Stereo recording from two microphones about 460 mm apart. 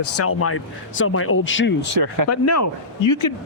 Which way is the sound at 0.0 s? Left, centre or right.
Left.